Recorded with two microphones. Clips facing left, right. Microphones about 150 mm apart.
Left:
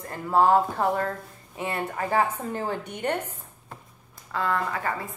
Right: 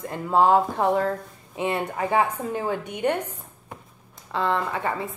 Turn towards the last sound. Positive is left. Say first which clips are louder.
# right 2 dB
turn(degrees=-25)  # may be behind; listen again after turning